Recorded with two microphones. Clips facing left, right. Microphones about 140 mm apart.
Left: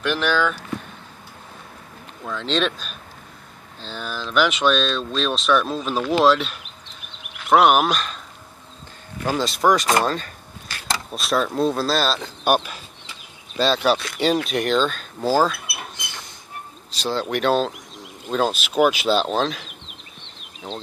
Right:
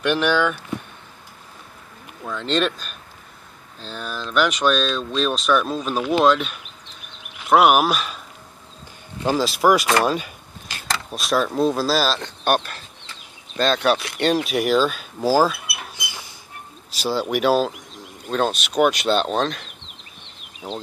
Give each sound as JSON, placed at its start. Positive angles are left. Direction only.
{"t": 0.1, "sound": "speech", "side_deg": -15}
{"t": 2.2, "sound": "speech", "side_deg": 0}
{"t": 9.3, "sound": "speech", "side_deg": -5}
{"t": 10.9, "sound": "speech", "side_deg": 0}